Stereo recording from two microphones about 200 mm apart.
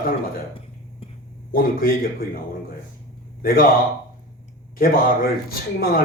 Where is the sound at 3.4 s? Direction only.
45° left (ahead or behind).